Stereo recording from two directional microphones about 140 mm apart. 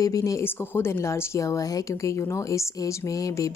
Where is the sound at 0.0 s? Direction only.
25° left (ahead or behind).